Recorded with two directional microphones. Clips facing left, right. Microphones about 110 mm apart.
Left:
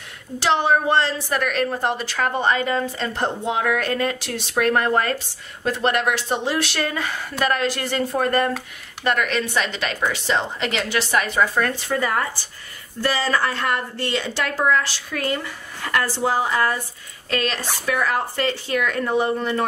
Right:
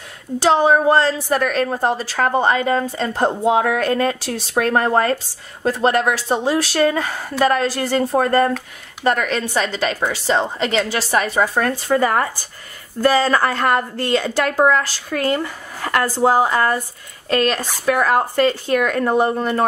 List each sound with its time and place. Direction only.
0.4 s a woman's voice: 40° right (ahead or behind)